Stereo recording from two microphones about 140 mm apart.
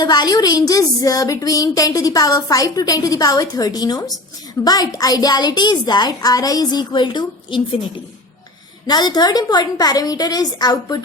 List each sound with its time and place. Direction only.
0.0 s a woman's voice: 30° left (ahead or behind)
8.9 s a woman's voice: 30° left (ahead or behind)